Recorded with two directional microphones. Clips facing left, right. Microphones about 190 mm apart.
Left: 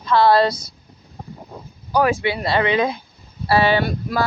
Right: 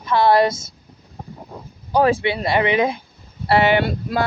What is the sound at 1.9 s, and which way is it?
Speech, 25° right (ahead or behind).